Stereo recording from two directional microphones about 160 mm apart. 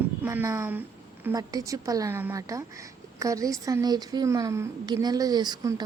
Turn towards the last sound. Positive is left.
turn(degrees=-25)  # may be behind; listen again after turning